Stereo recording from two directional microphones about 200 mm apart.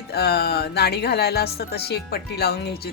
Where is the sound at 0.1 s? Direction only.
50° left (ahead or behind).